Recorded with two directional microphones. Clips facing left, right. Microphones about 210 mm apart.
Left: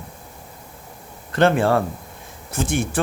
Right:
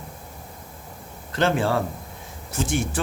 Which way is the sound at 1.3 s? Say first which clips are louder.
Left 5 dB; 55° left (ahead or behind).